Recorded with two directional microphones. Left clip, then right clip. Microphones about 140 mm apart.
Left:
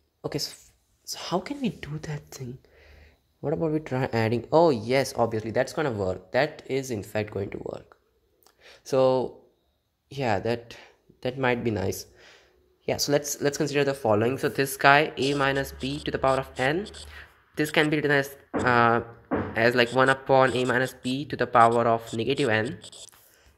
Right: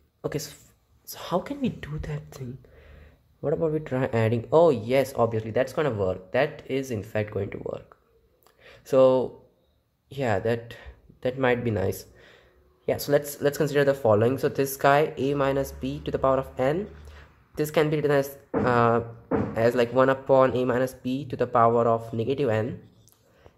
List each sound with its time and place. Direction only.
0.2 s speech: 20° left (ahead or behind)